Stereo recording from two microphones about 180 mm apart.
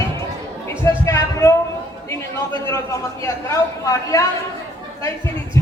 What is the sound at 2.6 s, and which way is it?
A man's voice, 15° left (ahead or behind).